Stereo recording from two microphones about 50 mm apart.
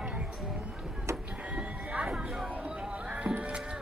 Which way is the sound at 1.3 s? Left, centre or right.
Right.